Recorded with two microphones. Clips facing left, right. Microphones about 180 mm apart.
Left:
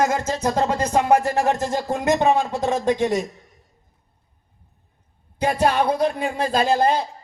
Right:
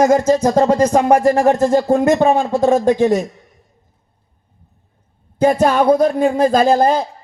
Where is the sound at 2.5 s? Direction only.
35° right (ahead or behind).